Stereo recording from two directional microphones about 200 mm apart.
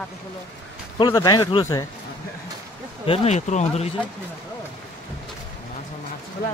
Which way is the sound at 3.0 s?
30° left (ahead or behind).